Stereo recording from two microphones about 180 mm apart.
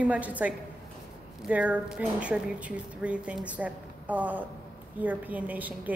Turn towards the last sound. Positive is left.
turn(degrees=-10)  # may be behind; listen again after turning